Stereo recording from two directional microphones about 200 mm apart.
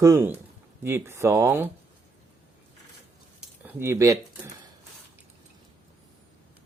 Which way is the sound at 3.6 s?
15° right (ahead or behind).